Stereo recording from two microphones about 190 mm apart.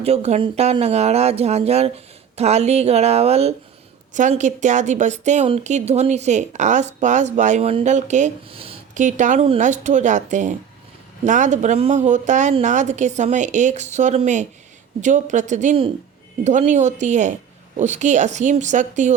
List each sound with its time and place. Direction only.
0.0 s a woman's voice: 35° right (ahead or behind)